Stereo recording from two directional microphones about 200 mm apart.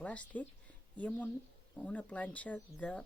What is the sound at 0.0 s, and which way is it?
Speech, 5° left (ahead or behind).